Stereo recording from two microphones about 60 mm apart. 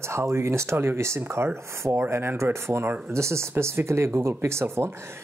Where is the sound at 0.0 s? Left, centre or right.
Right.